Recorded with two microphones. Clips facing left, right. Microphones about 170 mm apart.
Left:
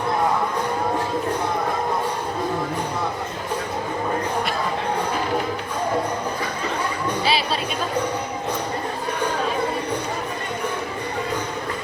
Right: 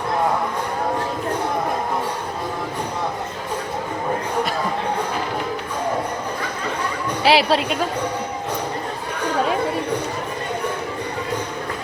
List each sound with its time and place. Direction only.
7.3 s a woman's voice: 90° right